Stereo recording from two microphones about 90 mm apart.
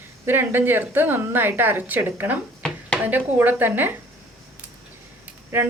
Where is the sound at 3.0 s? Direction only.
20° right (ahead or behind).